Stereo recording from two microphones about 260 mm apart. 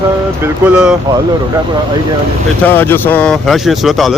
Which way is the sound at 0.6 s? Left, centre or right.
Centre.